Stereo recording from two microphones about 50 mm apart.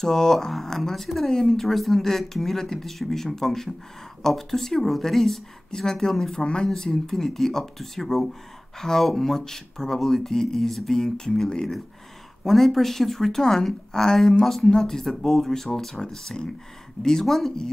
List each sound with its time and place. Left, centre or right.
0.0 s speech: centre